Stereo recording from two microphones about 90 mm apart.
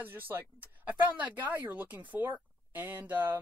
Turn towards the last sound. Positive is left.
turn(degrees=-20)  # may be behind; listen again after turning